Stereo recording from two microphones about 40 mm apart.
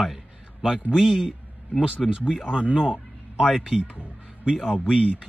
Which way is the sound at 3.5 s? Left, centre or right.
Centre.